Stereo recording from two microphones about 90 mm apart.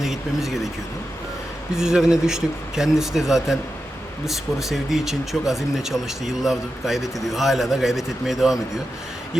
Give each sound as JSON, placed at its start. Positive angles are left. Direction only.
{"t": 0.0, "sound": "speech", "side_deg": -5}
{"t": 1.7, "sound": "speech", "side_deg": -5}